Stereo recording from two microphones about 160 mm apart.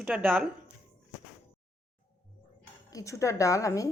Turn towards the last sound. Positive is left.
turn(degrees=20)  # may be behind; listen again after turning